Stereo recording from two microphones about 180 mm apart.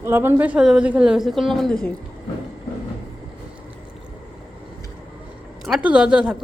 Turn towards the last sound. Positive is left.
turn(degrees=-5)  # may be behind; listen again after turning